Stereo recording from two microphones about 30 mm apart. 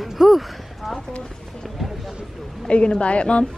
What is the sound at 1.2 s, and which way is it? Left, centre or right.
Run, left.